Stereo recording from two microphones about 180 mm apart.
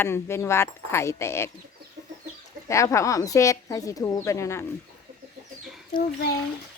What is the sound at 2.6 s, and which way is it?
A woman's voice, 15° left (ahead or behind).